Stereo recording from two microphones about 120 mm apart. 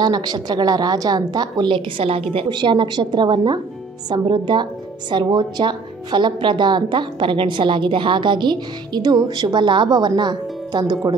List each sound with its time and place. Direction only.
0.0 s a woman's voice: 35° right (ahead or behind)